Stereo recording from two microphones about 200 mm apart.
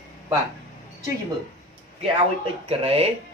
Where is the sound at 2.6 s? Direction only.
30° right (ahead or behind).